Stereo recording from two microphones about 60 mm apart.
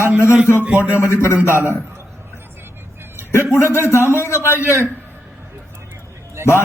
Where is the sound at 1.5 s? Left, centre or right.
Right.